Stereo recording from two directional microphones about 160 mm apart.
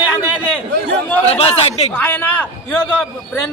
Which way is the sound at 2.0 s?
15° left (ahead or behind).